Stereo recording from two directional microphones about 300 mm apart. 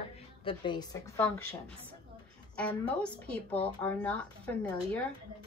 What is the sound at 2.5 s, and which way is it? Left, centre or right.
A woman's voice, centre.